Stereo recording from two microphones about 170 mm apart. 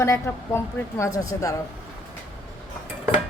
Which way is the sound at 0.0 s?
15° left (ahead or behind).